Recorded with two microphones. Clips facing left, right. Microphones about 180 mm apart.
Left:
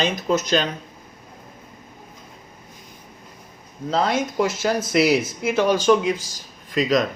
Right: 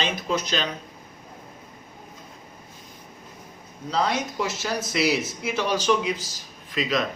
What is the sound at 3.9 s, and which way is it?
Speech, 50° left (ahead or behind).